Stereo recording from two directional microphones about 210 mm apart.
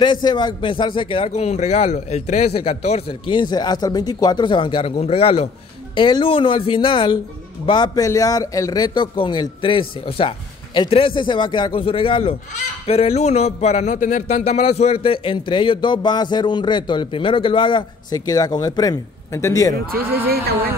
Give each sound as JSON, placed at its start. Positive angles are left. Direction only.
{"t": 0.0, "sound": "speech", "side_deg": 20}
{"t": 19.9, "sound": "speech", "side_deg": -45}